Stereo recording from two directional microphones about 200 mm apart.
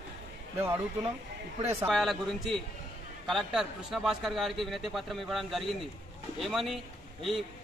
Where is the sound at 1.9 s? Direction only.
Centre (ahead or behind).